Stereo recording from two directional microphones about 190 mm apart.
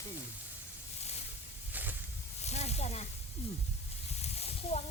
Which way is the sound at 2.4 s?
35° left (ahead or behind).